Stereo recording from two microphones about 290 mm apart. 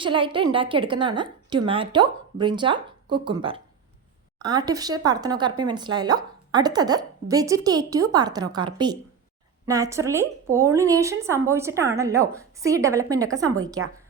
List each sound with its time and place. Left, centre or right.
0.0 s speech: centre